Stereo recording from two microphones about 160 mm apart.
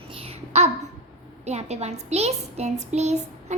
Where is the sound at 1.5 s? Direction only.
45° right (ahead or behind).